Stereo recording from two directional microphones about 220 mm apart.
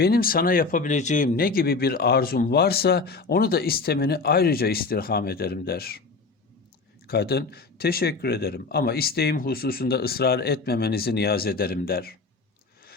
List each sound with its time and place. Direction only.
0.0 s speech: 45° left (ahead or behind)
7.1 s speech: 45° left (ahead or behind)